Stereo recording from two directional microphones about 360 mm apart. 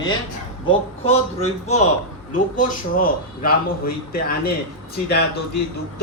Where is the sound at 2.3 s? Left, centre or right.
Left.